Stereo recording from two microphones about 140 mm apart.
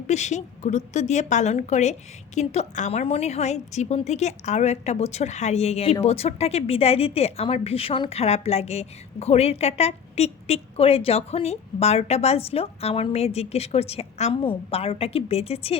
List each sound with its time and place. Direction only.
0.1 s a woman's voice: 55° left (ahead or behind)